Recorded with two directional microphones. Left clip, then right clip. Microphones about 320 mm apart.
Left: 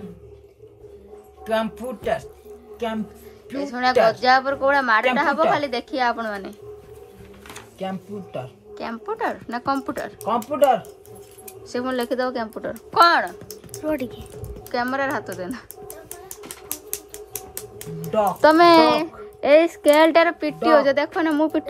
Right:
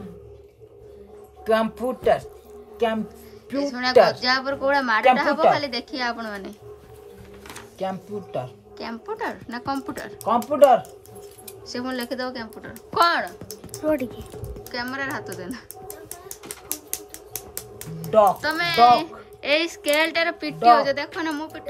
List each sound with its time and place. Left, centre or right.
1.4 s speech: right
3.5 s speech: centre
16.9 s music: centre
19.7 s speech: centre